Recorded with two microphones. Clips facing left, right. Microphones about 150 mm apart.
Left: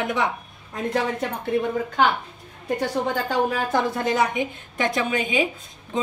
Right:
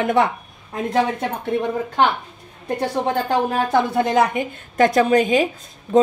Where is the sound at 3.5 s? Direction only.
70° right (ahead or behind).